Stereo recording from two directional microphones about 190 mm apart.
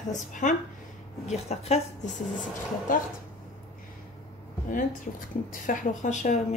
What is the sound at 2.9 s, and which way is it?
Speech, 45° left (ahead or behind).